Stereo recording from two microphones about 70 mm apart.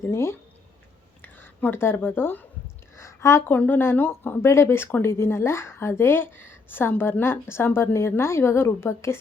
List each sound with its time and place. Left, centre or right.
0.0 s a woman's voice: left
1.2 s speech: left
3.0 s a sound: left
3.5 s speech: left
4.4 s a woman's voice: left